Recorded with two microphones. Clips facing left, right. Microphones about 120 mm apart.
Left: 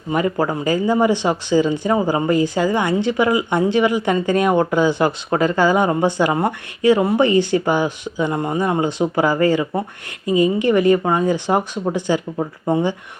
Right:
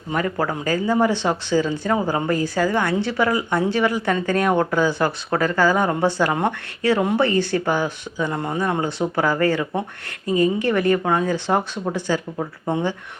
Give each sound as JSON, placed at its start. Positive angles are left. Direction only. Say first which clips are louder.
{"t": 0.1, "sound": "speech", "louder": "left 4 dB", "side_deg": 10}